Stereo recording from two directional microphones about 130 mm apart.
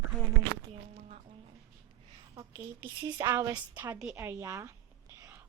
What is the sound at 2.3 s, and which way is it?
A woman's voice, 25° right (ahead or behind).